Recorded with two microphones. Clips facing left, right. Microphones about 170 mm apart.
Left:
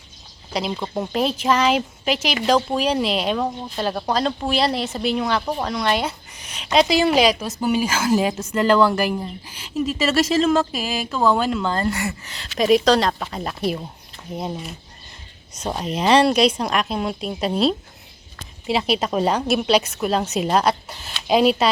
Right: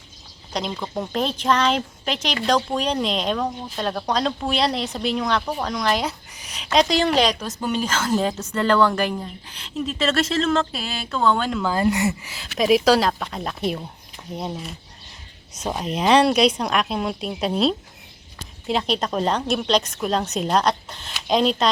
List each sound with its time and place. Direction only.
0.5 s a woman's voice: 5° left (ahead or behind)
11.6 s speech: 5° right (ahead or behind)
11.9 s speech: 20° right (ahead or behind)
12.3 s a woman's voice: centre (ahead or behind)